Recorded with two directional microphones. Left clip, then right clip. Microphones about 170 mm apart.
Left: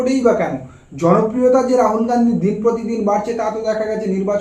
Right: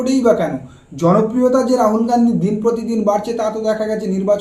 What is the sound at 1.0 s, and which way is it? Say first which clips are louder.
Speech: even; 15° right (ahead or behind).